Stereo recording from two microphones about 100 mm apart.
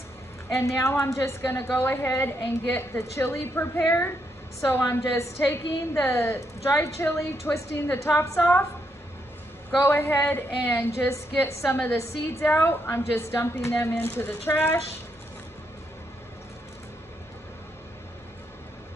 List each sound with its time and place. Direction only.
0.6 s a woman's voice: 30° left (ahead or behind)
9.8 s a woman's voice: 20° left (ahead or behind)